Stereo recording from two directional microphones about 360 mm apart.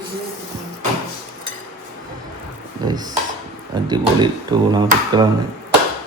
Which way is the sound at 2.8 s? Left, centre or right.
Centre.